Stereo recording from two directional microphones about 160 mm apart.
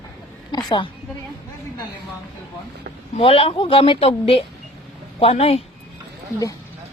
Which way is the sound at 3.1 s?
35° left (ahead or behind).